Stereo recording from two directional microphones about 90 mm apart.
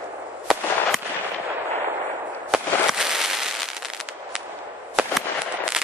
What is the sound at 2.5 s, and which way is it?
Fireworks, 5° right (ahead or behind).